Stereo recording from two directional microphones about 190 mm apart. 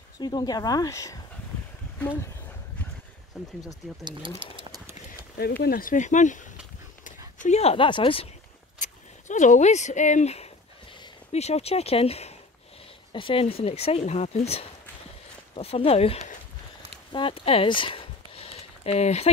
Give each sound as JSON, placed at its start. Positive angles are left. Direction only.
{"t": 0.2, "sound": "speech", "side_deg": 20}
{"t": 3.3, "sound": "speech", "side_deg": 0}
{"t": 4.4, "sound": "a sound", "side_deg": -25}
{"t": 5.6, "sound": "speech", "side_deg": 50}
{"t": 8.7, "sound": "speech", "side_deg": 40}
{"t": 17.1, "sound": "a sound", "side_deg": 30}